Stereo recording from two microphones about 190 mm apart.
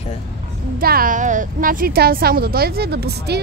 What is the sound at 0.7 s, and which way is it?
A woman's voice, 50° right (ahead or behind).